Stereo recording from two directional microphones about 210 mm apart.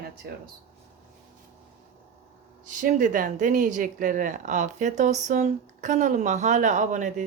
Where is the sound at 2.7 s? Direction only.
35° right (ahead or behind).